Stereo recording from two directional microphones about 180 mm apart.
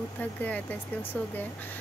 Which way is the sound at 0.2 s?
10° left (ahead or behind).